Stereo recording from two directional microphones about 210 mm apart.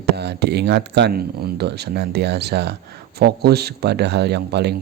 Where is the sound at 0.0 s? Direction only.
50° right (ahead or behind).